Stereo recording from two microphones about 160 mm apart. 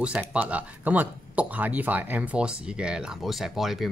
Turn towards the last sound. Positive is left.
turn(degrees=0)  # may be behind; listen again after turning